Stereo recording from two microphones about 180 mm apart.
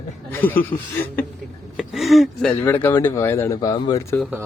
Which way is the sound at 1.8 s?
Centre (ahead or behind).